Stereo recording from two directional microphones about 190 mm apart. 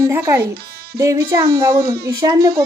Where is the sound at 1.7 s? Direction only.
55° right (ahead or behind).